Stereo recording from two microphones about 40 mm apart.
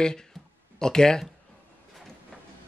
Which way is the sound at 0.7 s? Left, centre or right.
Centre.